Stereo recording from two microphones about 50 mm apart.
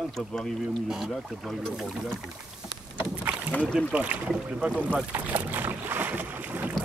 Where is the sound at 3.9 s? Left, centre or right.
Right.